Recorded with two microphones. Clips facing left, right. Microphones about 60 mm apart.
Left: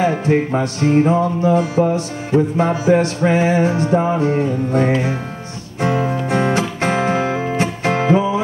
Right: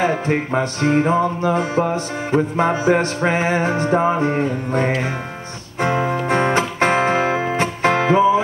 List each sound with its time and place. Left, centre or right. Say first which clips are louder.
0.0 s music: left 3 dB; right